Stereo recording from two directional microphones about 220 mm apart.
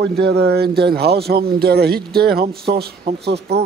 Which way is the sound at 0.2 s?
45° right (ahead or behind).